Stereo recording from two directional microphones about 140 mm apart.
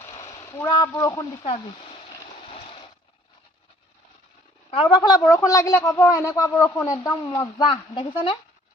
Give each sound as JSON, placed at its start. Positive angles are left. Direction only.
{"t": 0.0, "sound": "a sound", "side_deg": 25}
{"t": 1.4, "sound": "speech", "side_deg": 40}
{"t": 4.7, "sound": "a woman's voice", "side_deg": 30}
{"t": 7.3, "sound": "speech", "side_deg": 40}